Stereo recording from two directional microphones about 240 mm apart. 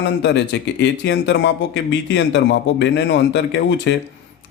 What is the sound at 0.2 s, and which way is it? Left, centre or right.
Speech, left.